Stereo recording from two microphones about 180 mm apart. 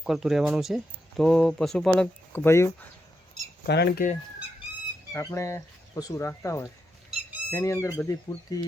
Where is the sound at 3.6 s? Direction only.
60° left (ahead or behind).